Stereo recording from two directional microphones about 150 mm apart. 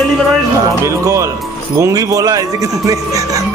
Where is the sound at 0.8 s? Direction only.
20° right (ahead or behind).